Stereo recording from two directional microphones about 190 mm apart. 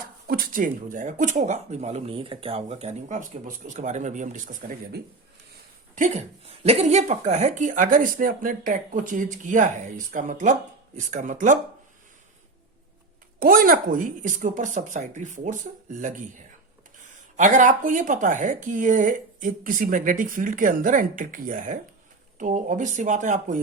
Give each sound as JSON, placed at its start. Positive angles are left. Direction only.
{"t": 0.3, "sound": "a woman's voice", "side_deg": -50}
{"t": 5.9, "sound": "a woman's voice", "side_deg": -40}
{"t": 13.4, "sound": "speech", "side_deg": -50}
{"t": 17.3, "sound": "a woman's voice", "side_deg": -40}